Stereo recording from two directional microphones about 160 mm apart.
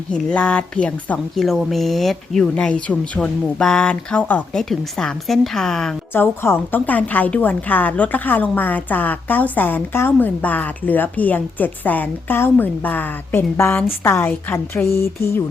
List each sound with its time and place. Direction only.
0.1 s speech: 5° left (ahead or behind)